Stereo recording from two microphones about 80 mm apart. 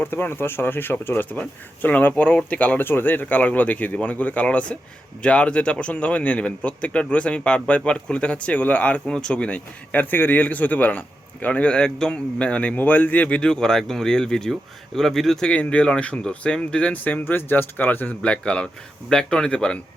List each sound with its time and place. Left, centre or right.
0.0 s a man's voice: left